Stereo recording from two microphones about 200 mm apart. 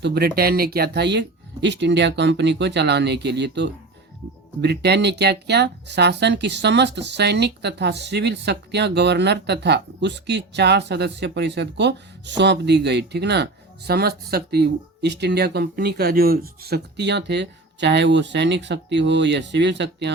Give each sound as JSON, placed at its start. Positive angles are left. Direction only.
{"t": 0.0, "sound": "speech", "side_deg": -55}